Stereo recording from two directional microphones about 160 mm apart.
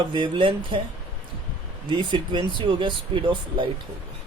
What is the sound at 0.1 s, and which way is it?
Speech, 30° right (ahead or behind).